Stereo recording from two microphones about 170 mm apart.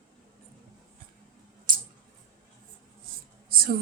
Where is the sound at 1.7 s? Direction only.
55° right (ahead or behind).